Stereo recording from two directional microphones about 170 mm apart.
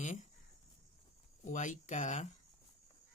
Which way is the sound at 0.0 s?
45° left (ahead or behind).